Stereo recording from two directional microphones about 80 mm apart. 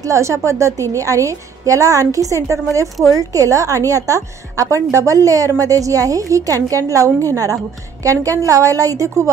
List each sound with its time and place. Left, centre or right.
0.0 s a woman's voice: right